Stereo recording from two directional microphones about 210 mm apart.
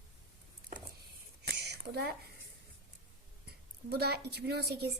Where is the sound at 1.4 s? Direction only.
50° right (ahead or behind).